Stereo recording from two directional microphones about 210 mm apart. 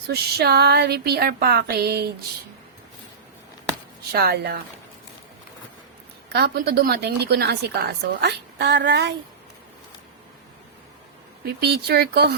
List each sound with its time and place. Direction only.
0.1 s a woman's voice: 50° right (ahead or behind)
4.1 s a woman's voice: 50° right (ahead or behind)
6.3 s a woman's voice: 50° right (ahead or behind)
11.4 s a woman's voice: 50° right (ahead or behind)